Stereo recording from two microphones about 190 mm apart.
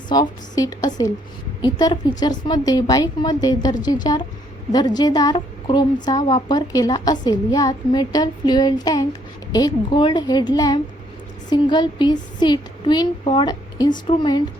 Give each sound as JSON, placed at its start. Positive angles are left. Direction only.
{"t": 0.1, "sound": "a woman's voice", "side_deg": 20}